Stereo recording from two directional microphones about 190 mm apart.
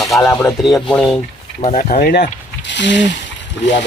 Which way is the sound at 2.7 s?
70° left (ahead or behind).